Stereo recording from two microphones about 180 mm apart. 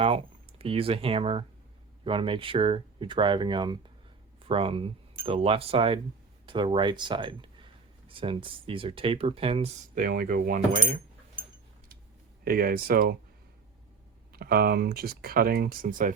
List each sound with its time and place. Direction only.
0.0 s speech: 30° right (ahead or behind)
9.9 s speech: 50° right (ahead or behind)
12.5 s speech: 55° right (ahead or behind)
14.3 s speech: 60° right (ahead or behind)